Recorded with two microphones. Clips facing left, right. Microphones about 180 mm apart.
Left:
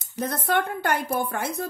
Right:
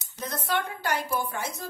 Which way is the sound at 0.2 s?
55° left (ahead or behind).